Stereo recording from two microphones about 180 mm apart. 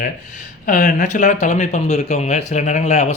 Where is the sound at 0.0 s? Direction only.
50° left (ahead or behind).